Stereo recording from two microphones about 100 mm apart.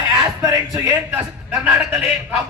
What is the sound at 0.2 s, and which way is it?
Speech, 35° right (ahead or behind).